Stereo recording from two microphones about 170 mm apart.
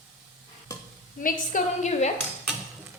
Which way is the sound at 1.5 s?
45° left (ahead or behind).